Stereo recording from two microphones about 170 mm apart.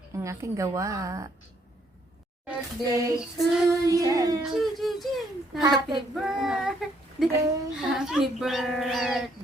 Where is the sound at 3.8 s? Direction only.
20° right (ahead or behind).